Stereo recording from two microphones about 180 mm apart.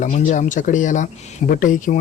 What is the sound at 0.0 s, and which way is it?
Speech, 45° left (ahead or behind).